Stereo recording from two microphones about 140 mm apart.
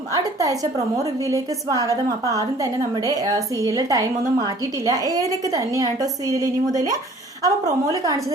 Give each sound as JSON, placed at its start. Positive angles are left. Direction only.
{"t": 0.1, "sound": "a woman's voice", "side_deg": -25}